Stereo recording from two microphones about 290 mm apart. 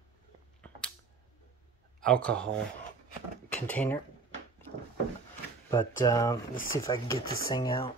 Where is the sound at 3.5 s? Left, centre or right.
Centre.